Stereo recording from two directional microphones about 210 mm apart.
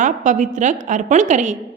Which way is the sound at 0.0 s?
35° right (ahead or behind).